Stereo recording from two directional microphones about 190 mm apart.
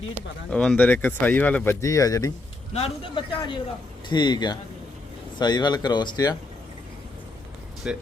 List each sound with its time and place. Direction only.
0.5 s speech: 5° left (ahead or behind)
2.7 s speech: 30° left (ahead or behind)
7.9 s speech: 5° right (ahead or behind)